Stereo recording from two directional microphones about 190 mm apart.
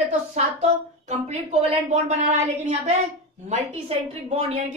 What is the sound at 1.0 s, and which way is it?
A woman's voice, 35° right (ahead or behind).